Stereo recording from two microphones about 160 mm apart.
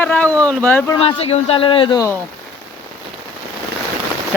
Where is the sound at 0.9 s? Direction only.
35° left (ahead or behind).